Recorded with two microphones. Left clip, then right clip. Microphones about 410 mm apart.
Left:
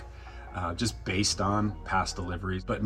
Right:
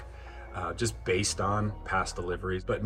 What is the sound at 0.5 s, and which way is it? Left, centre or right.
Speech, right.